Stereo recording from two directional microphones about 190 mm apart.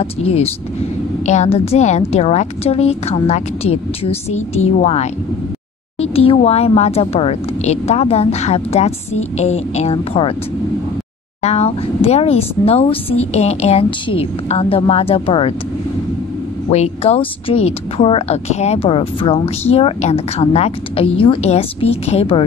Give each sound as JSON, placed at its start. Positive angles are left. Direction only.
{"t": 0.0, "sound": "a woman's voice", "side_deg": 30}
{"t": 11.4, "sound": "a woman's voice", "side_deg": 35}
{"t": 16.7, "sound": "a woman's voice", "side_deg": 35}